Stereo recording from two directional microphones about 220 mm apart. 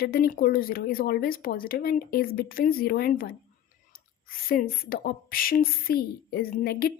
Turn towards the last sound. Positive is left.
turn(degrees=45)  # may be behind; listen again after turning